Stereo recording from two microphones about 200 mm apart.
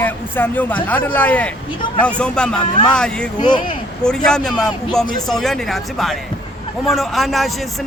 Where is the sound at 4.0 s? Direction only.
5° left (ahead or behind).